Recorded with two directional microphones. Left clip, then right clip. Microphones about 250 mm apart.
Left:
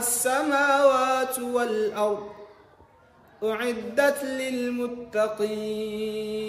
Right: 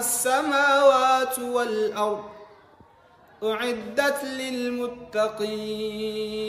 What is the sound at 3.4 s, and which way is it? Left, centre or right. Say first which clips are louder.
Mantra: right 1 dB; centre.